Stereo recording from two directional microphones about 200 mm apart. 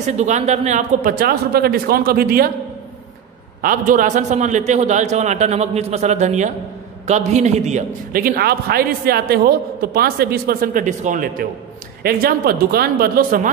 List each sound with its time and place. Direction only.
0.0 s a man's voice: 35° right (ahead or behind)
3.6 s a man's voice: 40° right (ahead or behind)